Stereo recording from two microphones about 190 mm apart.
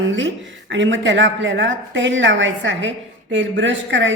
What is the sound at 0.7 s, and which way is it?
A woman's voice, 75° right (ahead or behind).